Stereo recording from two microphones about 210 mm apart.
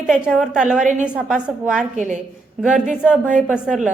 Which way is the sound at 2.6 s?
5° right (ahead or behind).